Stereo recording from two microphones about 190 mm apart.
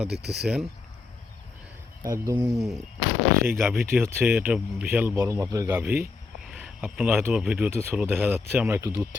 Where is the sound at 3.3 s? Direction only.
50° right (ahead or behind).